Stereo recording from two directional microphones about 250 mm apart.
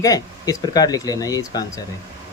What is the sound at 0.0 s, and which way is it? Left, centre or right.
Speech, centre.